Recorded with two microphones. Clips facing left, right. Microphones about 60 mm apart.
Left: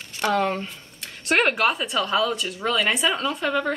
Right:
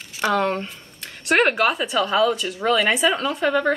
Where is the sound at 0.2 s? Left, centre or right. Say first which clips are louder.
Right 2 dB; centre.